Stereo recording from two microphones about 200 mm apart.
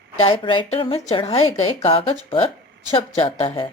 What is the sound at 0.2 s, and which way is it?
A woman's voice, 25° left (ahead or behind).